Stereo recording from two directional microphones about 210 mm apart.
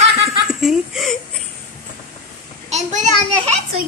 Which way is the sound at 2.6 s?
35° right (ahead or behind).